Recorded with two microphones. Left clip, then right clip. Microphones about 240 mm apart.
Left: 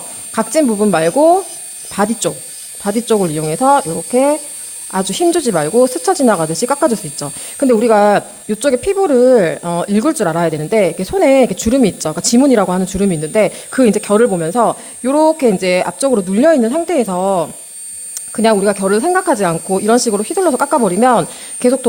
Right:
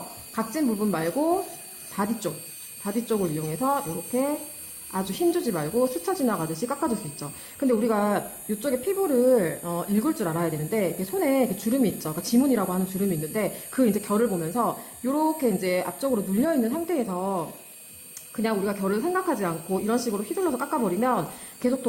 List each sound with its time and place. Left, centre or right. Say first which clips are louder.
0.3 s speech: left 14 dB; left